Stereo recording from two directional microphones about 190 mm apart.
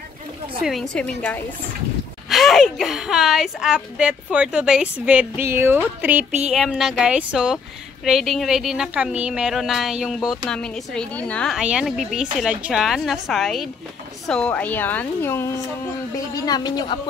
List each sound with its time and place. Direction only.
0.6 s a woman's voice: centre (ahead or behind); by 17.0 s 20° left (ahead or behind)